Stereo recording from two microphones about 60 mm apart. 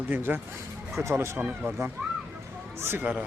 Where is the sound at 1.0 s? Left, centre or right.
Right.